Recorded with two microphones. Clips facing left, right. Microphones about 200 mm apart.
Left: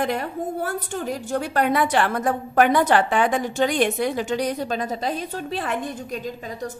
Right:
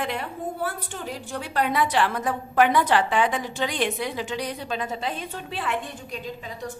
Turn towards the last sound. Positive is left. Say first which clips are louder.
# left 6 dB
turn(degrees=45)  # may be behind; listen again after turning